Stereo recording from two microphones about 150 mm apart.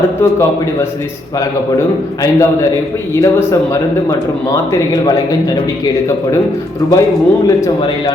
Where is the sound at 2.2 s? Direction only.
20° left (ahead or behind).